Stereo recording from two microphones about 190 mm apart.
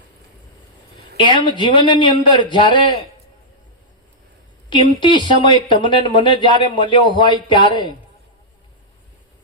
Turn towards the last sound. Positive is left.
turn(degrees=25)  # may be behind; listen again after turning